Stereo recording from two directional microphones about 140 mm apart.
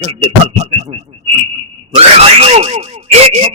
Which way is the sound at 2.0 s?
45° right (ahead or behind).